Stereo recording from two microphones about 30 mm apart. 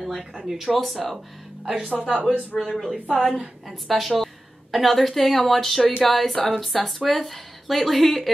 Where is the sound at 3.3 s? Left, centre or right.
Right.